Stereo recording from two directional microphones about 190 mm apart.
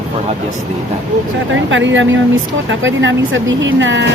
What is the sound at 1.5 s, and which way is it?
Speech, 80° right.